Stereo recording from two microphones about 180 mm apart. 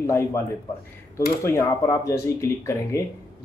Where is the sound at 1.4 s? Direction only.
15° left (ahead or behind).